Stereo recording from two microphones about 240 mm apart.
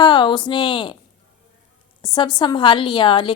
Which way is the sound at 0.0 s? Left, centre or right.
Centre.